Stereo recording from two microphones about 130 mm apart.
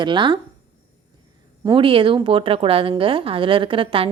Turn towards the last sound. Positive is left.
turn(degrees=-40)  # may be behind; listen again after turning